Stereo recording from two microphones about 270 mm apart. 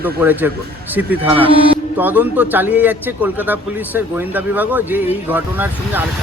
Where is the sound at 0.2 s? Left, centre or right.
Centre.